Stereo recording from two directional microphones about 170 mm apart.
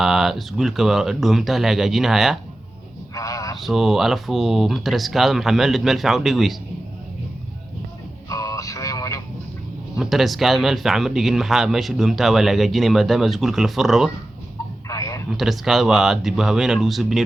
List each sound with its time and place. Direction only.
0.0 s a man's voice: centre (ahead or behind)
3.2 s a sound: 20° left (ahead or behind)
3.6 s a man's voice: centre (ahead or behind)
8.3 s radio: 20° left (ahead or behind)
10.0 s a man's voice: centre (ahead or behind)
14.8 s a sound: 20° left (ahead or behind)
15.3 s a man's voice: centre (ahead or behind)